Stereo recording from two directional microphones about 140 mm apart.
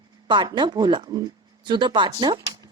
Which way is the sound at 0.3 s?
35° right (ahead or behind).